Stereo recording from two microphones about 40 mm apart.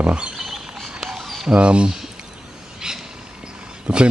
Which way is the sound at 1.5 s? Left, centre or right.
Right.